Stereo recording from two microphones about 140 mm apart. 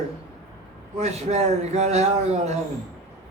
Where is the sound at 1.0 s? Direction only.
50° right (ahead or behind).